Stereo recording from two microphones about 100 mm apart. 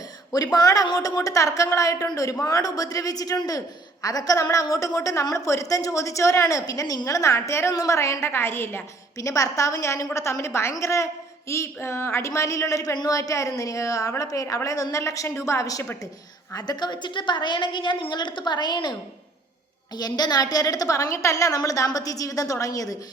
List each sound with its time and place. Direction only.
0.3 s a woman's voice: 40° left (ahead or behind)
16.6 s a woman's voice: 45° left (ahead or behind)
20.0 s a woman's voice: 45° left (ahead or behind)